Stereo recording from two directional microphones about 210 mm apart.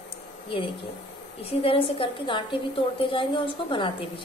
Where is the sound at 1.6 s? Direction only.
25° left (ahead or behind).